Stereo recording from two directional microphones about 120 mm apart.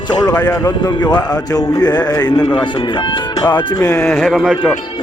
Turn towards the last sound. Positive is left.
turn(degrees=0)  # may be behind; listen again after turning